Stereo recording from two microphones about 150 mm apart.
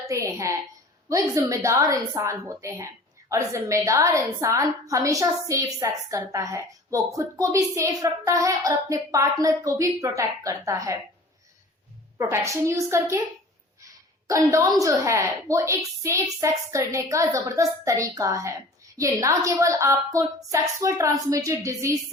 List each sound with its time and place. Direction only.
0.1 s a woman's voice: 20° right (ahead or behind)
12.1 s a woman's voice: 20° right (ahead or behind)
13.8 s a sound: 20° right (ahead or behind)
14.8 s a woman's voice: 20° right (ahead or behind)